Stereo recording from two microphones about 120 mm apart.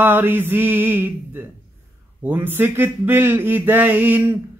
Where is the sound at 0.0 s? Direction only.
15° right (ahead or behind).